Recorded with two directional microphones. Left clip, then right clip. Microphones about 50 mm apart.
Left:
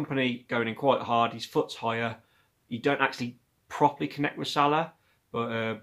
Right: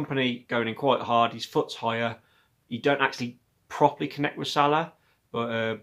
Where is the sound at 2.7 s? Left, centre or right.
Centre.